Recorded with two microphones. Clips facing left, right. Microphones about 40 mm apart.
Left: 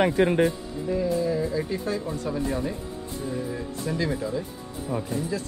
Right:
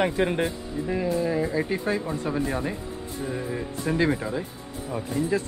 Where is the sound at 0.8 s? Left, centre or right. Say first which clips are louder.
Left 1 dB; right.